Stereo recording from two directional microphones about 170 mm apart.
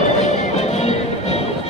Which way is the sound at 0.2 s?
40° left (ahead or behind).